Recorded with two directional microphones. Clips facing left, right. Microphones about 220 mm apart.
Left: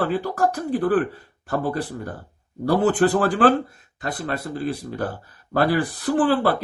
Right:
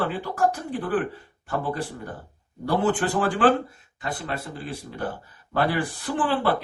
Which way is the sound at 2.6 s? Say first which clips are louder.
Left 5 dB; 35° left (ahead or behind).